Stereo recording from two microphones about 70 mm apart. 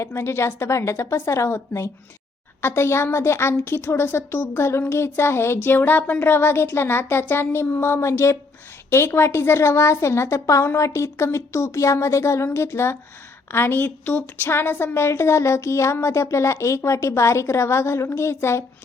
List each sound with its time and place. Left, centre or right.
0.0 s speech: left